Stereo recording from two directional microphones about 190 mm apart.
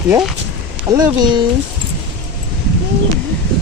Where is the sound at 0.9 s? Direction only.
20° right (ahead or behind).